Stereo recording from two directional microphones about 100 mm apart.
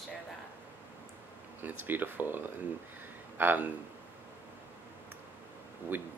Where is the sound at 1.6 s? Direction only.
20° right (ahead or behind).